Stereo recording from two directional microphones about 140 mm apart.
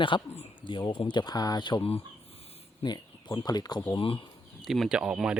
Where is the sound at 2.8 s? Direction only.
30° left (ahead or behind).